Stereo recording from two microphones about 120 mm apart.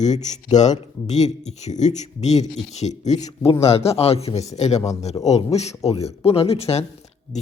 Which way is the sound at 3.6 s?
60° left (ahead or behind).